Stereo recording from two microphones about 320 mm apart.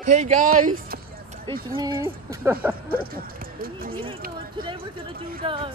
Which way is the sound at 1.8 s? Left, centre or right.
Centre.